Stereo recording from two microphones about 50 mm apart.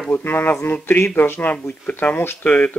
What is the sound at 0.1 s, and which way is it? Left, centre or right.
Speech, left.